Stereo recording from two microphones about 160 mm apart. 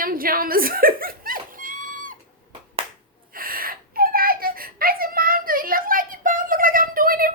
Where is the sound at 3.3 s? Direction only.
65° right (ahead or behind).